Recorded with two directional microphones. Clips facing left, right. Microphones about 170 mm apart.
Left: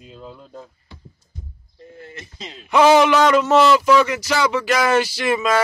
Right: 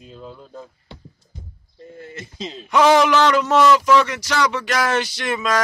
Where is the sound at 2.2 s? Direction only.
25° right (ahead or behind).